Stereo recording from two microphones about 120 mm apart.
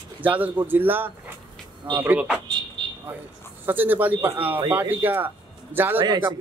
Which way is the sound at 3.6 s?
15° right (ahead or behind).